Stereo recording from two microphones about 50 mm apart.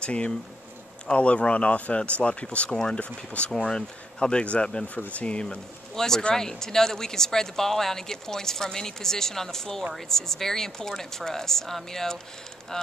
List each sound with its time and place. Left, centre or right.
0.0 s speech: left
3.5 s speech: centre
4.8 s speech: left
5.9 s speech: centre